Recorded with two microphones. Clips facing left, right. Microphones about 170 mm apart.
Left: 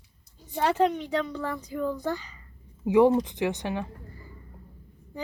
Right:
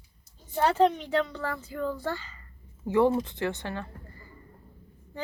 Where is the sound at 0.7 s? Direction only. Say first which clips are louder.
Right 1 dB; 10° left (ahead or behind).